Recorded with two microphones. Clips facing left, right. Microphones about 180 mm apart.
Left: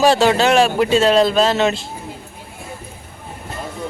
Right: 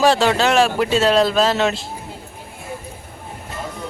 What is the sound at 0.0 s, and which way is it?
Speech, centre (ahead or behind).